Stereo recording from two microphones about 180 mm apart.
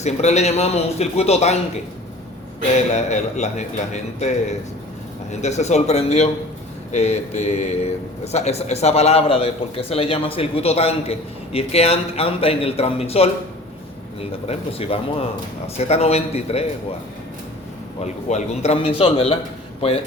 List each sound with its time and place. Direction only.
0.0 s a man's voice: 40° left (ahead or behind)
2.7 s a man's voice: 40° left (ahead or behind)
14.4 s a man's voice: 35° left (ahead or behind)
18.0 s a man's voice: 40° left (ahead or behind)